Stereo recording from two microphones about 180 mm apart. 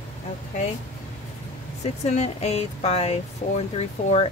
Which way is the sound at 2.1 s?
35° left (ahead or behind).